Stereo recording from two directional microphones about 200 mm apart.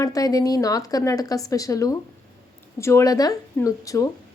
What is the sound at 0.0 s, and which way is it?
A woman's voice, 15° left (ahead or behind).